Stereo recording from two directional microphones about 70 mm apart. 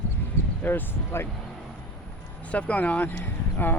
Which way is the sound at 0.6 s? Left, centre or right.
Left.